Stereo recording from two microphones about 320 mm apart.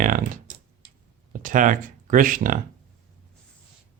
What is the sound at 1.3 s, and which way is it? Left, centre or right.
Speech, right.